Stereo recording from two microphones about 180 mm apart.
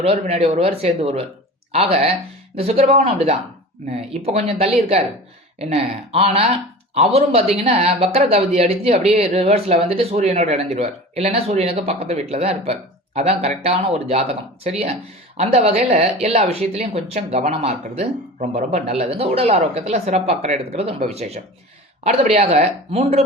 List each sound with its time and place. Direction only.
0.0 s speech: 30° right (ahead or behind)